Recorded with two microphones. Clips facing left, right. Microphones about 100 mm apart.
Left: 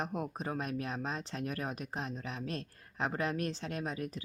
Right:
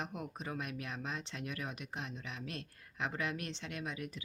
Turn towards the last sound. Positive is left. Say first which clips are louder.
# left 4 dB
turn(degrees=40)  # may be behind; listen again after turning